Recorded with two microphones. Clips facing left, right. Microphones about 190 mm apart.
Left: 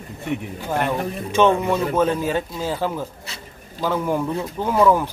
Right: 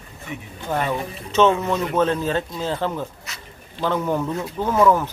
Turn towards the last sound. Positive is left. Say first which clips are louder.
# even
turn(degrees=10)  # may be behind; listen again after turning